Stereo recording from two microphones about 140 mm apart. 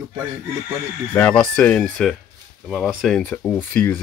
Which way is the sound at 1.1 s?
10° left (ahead or behind).